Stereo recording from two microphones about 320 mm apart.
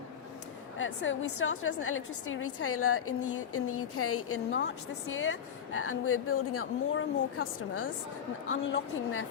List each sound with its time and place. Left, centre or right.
0.8 s a woman's voice: left